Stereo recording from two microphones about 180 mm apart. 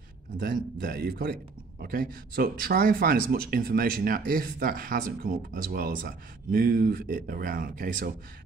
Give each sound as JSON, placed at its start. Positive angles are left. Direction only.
{"t": 0.4, "sound": "a man's voice", "side_deg": -60}